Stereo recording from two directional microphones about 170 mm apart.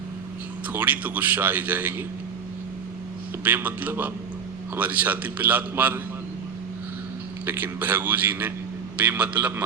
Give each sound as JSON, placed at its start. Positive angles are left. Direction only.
{"t": 0.7, "sound": "a man's voice", "side_deg": -10}
{"t": 3.4, "sound": "a man's voice", "side_deg": -10}
{"t": 7.4, "sound": "a man's voice", "side_deg": -10}